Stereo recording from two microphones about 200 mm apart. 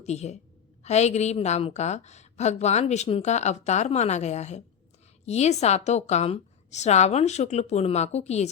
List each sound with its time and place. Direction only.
0.0 s a woman's voice: 35° left (ahead or behind)